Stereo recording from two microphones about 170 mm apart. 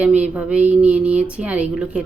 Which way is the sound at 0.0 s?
5° right (ahead or behind).